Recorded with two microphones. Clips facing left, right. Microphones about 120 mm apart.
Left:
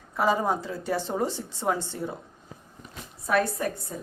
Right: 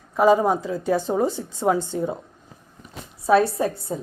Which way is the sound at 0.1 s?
15° right (ahead or behind).